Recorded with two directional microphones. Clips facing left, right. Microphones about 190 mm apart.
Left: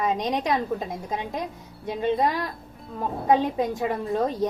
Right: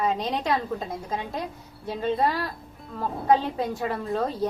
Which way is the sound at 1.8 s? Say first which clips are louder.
Left 1 dB; 15° left (ahead or behind).